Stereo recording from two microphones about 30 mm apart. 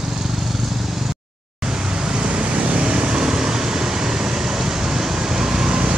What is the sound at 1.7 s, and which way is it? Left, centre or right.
Vehicle, right.